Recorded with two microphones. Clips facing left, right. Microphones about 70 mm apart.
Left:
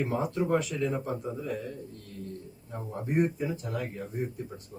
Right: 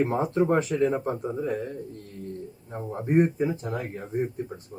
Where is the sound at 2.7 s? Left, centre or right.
Right.